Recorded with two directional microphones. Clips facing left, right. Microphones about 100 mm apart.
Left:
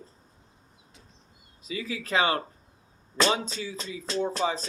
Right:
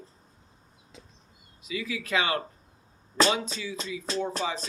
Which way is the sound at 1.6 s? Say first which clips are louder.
Even; 35° left (ahead or behind).